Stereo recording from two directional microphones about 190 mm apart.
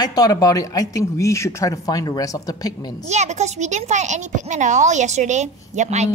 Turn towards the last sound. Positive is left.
turn(degrees=-40)  # may be behind; listen again after turning